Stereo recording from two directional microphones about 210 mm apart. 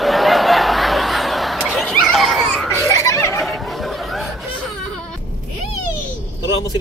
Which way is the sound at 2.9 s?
15° left (ahead or behind).